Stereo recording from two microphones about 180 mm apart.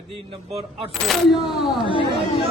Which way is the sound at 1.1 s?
Centre (ahead or behind).